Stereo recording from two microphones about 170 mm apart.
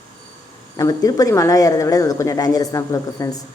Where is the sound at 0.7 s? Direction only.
20° left (ahead or behind).